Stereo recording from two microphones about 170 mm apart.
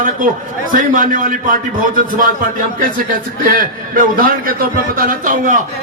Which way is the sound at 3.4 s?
55° right (ahead or behind).